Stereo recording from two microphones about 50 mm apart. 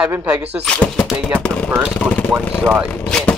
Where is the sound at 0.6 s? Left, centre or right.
Left.